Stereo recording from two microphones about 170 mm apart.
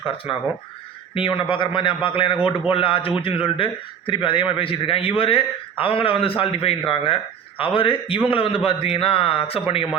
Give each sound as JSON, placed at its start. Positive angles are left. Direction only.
{"t": 0.3, "sound": "a man's voice", "side_deg": 35}